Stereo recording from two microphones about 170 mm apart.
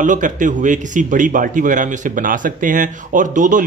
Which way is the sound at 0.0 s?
50° right (ahead or behind).